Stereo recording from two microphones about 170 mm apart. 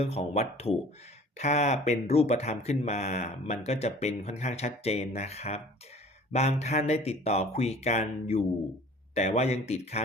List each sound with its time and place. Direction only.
0.0 s speech: 40° left (ahead or behind)